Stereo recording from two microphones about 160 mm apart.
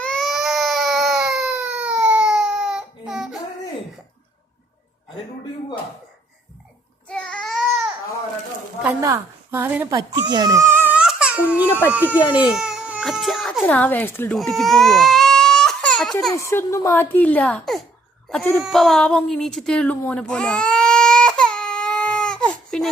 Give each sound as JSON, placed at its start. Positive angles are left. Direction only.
{"t": 0.0, "sound": "baby cry", "side_deg": 5}
{"t": 7.1, "sound": "child singing", "side_deg": 5}
{"t": 9.0, "sound": "a woman's voice", "side_deg": -15}
{"t": 9.9, "sound": "speech", "side_deg": -25}
{"t": 12.5, "sound": "baby cry", "side_deg": -5}
{"t": 13.7, "sound": "a child's voice", "side_deg": 10}
{"t": 14.3, "sound": "baby cry", "side_deg": 0}
{"t": 16.3, "sound": "a child's voice", "side_deg": 20}
{"t": 18.6, "sound": "music", "side_deg": 0}
{"t": 20.0, "sound": "baby cry", "side_deg": 5}